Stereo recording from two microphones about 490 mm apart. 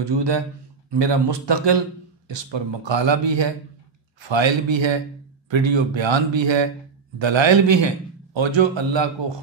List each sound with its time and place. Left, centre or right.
0.0 s a man's voice: right